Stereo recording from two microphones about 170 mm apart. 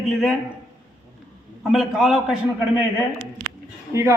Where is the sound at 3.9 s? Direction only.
15° right (ahead or behind).